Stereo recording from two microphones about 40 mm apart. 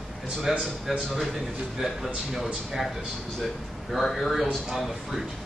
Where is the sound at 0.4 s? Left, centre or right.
Centre.